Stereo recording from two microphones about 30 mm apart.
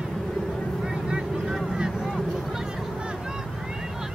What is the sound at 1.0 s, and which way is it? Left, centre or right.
Vehicle, right.